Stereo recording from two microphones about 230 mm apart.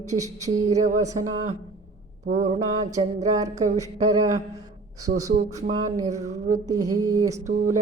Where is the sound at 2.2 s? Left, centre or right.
Right.